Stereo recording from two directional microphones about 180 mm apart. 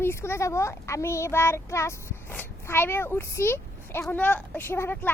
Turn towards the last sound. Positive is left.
turn(degrees=15)  # may be behind; listen again after turning